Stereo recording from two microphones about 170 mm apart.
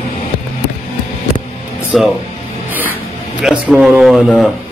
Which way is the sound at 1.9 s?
Centre (ahead or behind).